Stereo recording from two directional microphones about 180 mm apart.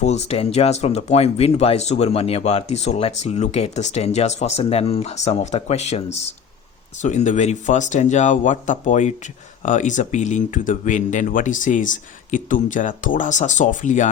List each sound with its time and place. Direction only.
0.0 s speech: 40° left (ahead or behind)